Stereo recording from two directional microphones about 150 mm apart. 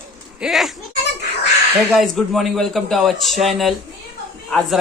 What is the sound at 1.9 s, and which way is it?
Speech, centre (ahead or behind).